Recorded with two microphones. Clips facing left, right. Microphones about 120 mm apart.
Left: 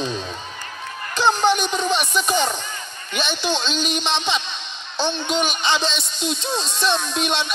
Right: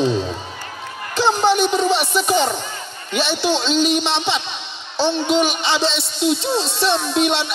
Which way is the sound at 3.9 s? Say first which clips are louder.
Right 3 dB; 15° right (ahead or behind).